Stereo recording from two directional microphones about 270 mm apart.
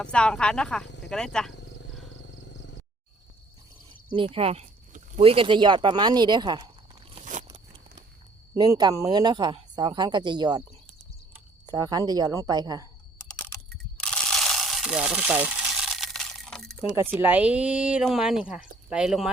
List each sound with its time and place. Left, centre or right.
0.0 s speech: centre
0.9 s snake: left
1.1 s speech: centre
4.2 s speech: right
7.2 s biting: right
7.4 s a sound: centre
8.5 s speech: centre
11.7 s speech: centre
13.2 s typing: centre
14.0 s a sound: centre
16.9 s speech: centre